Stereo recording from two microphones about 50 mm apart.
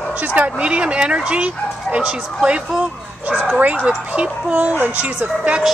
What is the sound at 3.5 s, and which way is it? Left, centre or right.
Speech, right.